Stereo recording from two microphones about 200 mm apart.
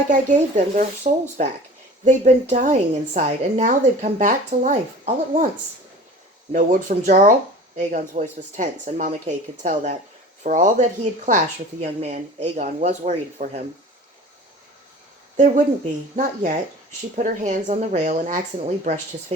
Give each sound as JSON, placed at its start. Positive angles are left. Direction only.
{"t": 0.1, "sound": "speech", "side_deg": -35}
{"t": 6.5, "sound": "speech", "side_deg": -40}
{"t": 15.4, "sound": "speech", "side_deg": -40}